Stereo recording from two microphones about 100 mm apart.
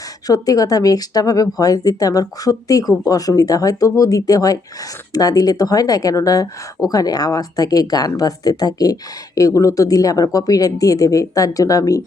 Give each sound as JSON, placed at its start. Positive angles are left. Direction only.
{"t": 0.3, "sound": "speech", "side_deg": 35}